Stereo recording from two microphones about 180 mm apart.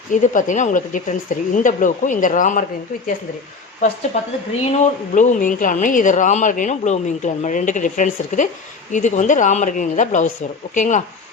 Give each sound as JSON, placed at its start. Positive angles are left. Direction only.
{"t": 0.1, "sound": "speech", "side_deg": 45}
{"t": 3.8, "sound": "speech", "side_deg": 45}